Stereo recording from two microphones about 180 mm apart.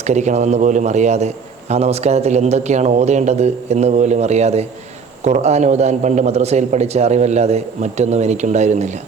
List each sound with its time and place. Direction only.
0.1 s a man's voice: 40° right (ahead or behind)